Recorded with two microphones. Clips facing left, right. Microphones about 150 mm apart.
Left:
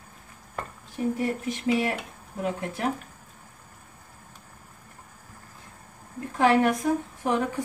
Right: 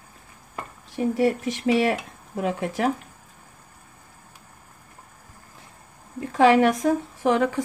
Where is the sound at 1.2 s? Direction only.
90° right.